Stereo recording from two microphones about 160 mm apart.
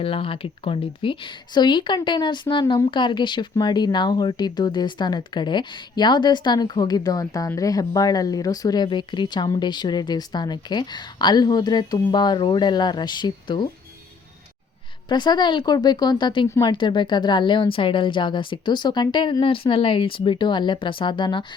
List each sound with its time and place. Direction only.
0.0 s a woman's voice: 35° left (ahead or behind)
15.1 s speech: 30° left (ahead or behind)
16.5 s speech: 20° left (ahead or behind)
16.7 s speech: 30° left (ahead or behind)